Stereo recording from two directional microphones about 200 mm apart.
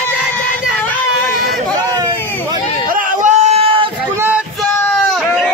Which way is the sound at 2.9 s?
40° right (ahead or behind).